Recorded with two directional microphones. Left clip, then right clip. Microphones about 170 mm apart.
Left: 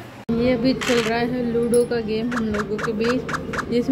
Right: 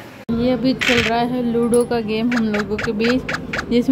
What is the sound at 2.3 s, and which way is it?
Speech, 5° right (ahead or behind).